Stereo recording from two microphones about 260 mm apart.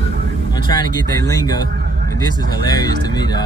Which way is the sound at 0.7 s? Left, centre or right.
Centre.